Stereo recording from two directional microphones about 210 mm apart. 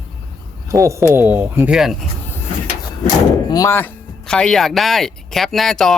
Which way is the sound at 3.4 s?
15° left (ahead or behind).